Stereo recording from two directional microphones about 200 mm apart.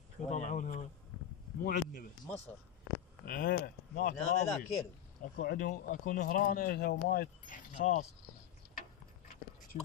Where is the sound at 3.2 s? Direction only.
50° left (ahead or behind).